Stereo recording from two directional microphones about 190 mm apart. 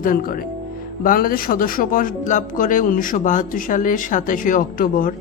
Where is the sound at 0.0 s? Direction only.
45° left (ahead or behind).